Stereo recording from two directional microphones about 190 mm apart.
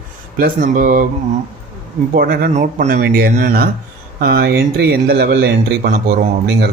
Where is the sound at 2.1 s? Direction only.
55° right (ahead or behind).